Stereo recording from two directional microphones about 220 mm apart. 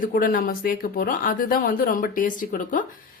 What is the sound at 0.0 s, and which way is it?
A woman's voice, 40° left (ahead or behind).